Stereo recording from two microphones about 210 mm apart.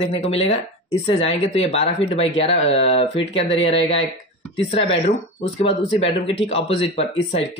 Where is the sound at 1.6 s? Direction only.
30° left (ahead or behind).